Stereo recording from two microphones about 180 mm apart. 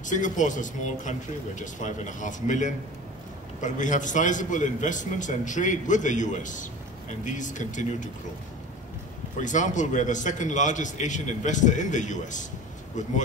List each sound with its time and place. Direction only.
0.0 s a man's voice: 45° left (ahead or behind)
9.4 s a man's voice: 45° left (ahead or behind)